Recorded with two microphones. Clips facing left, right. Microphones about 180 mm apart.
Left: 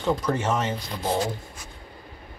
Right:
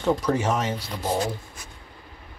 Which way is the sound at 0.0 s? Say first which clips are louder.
Right 2 dB; 5° right (ahead or behind).